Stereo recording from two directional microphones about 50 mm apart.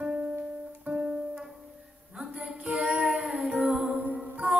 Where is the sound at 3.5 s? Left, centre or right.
Right.